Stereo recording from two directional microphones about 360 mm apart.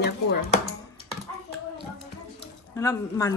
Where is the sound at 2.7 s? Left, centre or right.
Centre.